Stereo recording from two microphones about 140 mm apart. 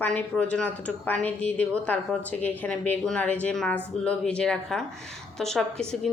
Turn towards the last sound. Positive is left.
turn(degrees=5)  # may be behind; listen again after turning